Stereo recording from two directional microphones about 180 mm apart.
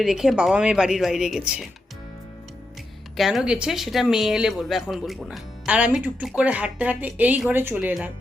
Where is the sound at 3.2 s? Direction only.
Centre (ahead or behind).